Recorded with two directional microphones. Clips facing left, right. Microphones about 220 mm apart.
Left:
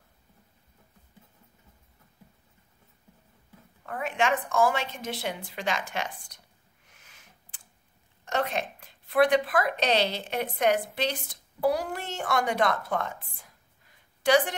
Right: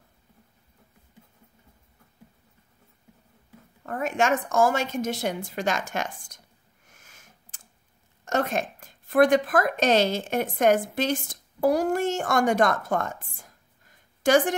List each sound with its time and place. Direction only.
3.8 s a woman's voice: 45° right (ahead or behind)
6.9 s sniff: 45° right (ahead or behind)
8.3 s speech: 45° right (ahead or behind)